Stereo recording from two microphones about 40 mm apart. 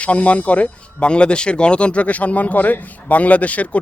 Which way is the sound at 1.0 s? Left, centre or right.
Left.